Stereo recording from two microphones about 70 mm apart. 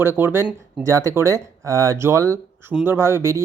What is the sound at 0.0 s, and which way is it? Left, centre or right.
Speech, right.